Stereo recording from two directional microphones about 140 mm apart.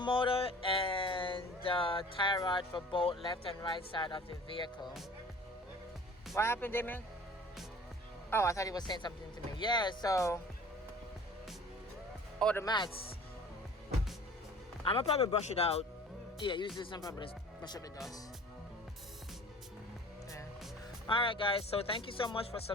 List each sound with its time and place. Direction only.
0.0 s music: 40° left (ahead or behind)
3.2 s speech: 35° left (ahead or behind)
6.3 s a man's voice: 20° left (ahead or behind)
8.3 s speech: 20° left (ahead or behind)
12.6 s speech: 30° left (ahead or behind)
14.8 s speech: 45° left (ahead or behind)
16.4 s speech: 35° left (ahead or behind)
21.1 s speech: 40° left (ahead or behind)